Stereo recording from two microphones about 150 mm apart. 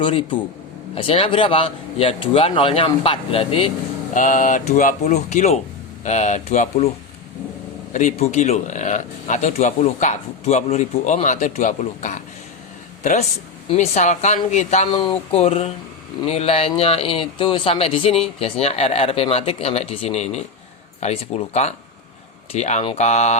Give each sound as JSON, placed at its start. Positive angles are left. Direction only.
{"t": 0.0, "sound": "speech", "side_deg": 35}
{"t": 4.1, "sound": "speech", "side_deg": 60}
{"t": 7.9, "sound": "speech", "side_deg": 50}